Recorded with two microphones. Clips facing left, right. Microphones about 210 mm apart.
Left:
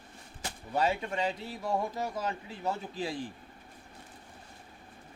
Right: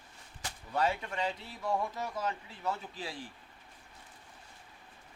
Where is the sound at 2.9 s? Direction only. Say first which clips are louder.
Left 7 dB; 15° left (ahead or behind).